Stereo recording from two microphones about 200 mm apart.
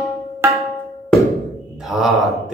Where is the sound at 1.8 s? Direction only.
Centre (ahead or behind).